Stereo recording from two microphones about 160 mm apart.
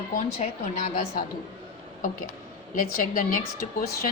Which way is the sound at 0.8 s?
60° left (ahead or behind).